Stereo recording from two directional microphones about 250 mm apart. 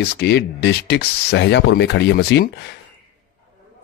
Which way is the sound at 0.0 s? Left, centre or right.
Left.